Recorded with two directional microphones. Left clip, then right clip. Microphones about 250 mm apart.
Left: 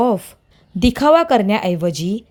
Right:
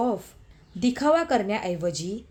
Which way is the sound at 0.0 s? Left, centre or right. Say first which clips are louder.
Left 10 dB; left.